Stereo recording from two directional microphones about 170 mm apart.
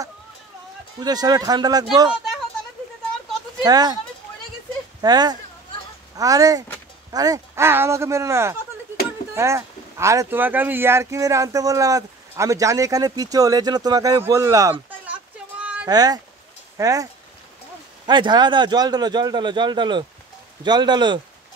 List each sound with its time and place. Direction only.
1.0 s speech: 25° right (ahead or behind)
3.6 s speech: 25° right (ahead or behind)
5.0 s speech: 25° right (ahead or behind)
15.6 s a sound: 5° right (ahead or behind)
15.9 s speech: 25° right (ahead or behind)